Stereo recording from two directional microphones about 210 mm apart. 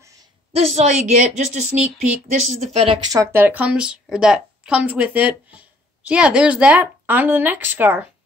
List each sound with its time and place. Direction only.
0.5 s a woman's voice: 30° right (ahead or behind)
3.1 s a woman's voice: 15° right (ahead or behind)